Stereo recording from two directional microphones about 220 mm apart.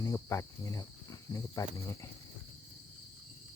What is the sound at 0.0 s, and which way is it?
Speech, 15° left (ahead or behind).